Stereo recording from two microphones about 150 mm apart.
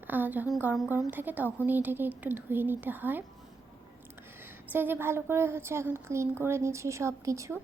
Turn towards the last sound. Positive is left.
turn(degrees=-20)  # may be behind; listen again after turning